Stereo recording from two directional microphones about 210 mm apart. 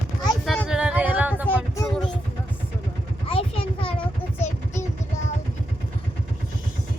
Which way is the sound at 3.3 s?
25° left (ahead or behind).